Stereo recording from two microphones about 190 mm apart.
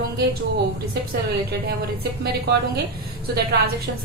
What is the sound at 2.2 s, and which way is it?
Speech, 60° right (ahead or behind).